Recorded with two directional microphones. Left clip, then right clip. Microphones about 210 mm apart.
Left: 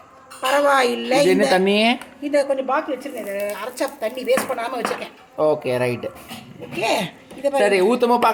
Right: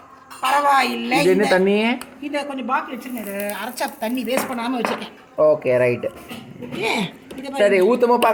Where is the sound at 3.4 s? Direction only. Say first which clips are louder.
Even; 25° left (ahead or behind).